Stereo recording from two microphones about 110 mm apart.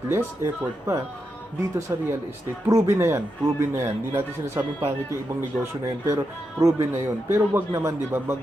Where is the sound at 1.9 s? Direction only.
30° right (ahead or behind).